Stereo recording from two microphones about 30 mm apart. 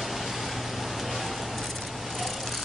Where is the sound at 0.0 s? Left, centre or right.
Centre.